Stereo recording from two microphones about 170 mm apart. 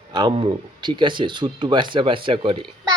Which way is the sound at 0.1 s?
25° right (ahead or behind).